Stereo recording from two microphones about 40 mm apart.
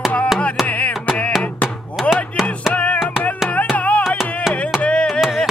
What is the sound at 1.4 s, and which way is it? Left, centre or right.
Chopping, left.